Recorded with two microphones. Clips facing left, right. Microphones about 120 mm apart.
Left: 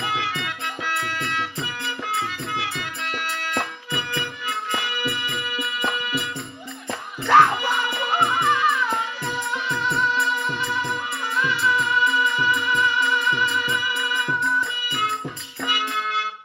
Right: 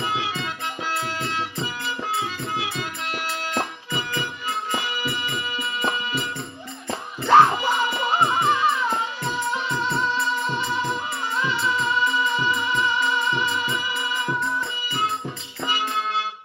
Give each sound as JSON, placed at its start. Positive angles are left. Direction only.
{"t": 0.0, "sound": "music", "side_deg": -25}
{"t": 7.3, "sound": "music", "side_deg": -25}
{"t": 15.6, "sound": "music", "side_deg": -30}